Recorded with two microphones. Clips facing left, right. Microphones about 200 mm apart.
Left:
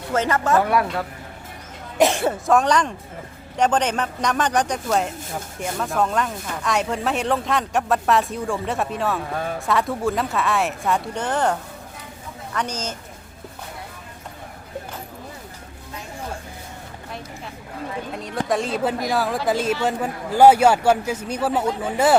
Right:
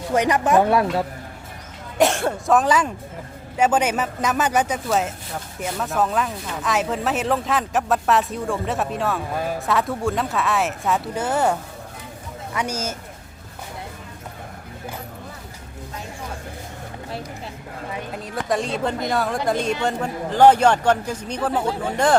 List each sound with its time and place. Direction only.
0.1 s speech: 15° right (ahead or behind)
2.0 s speech: centre (ahead or behind)
12.5 s speech: 10° right (ahead or behind)
18.1 s a man's voice: centre (ahead or behind)